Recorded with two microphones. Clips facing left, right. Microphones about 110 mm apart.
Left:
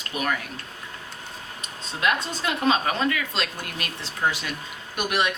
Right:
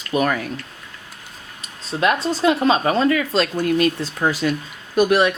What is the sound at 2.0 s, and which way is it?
Speech, 35° right (ahead or behind).